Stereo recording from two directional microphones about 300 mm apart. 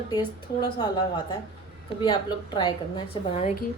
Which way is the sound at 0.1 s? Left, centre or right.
Centre.